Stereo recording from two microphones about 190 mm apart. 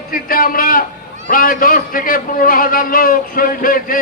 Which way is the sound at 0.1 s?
50° left (ahead or behind).